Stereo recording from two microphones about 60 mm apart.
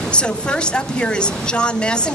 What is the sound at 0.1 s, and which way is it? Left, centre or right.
Speech, centre.